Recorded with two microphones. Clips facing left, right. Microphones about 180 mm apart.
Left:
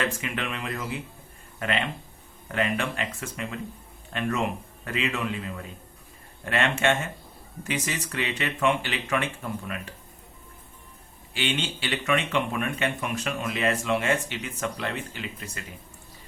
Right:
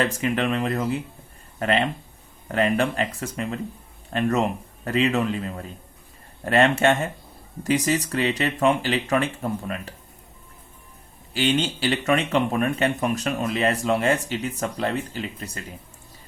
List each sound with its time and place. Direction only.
0.0 s speech: 40° right (ahead or behind)
11.3 s speech: 40° right (ahead or behind)